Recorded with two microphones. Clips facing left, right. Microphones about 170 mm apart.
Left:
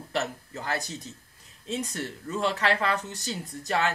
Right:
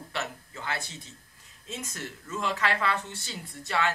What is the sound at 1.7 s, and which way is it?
Speech, 35° left (ahead or behind).